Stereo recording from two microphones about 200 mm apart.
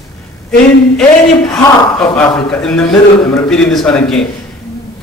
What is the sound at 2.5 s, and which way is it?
A man's voice, 5° left (ahead or behind).